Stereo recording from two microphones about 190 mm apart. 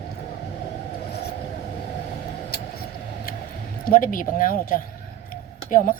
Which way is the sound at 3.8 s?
45° left (ahead or behind).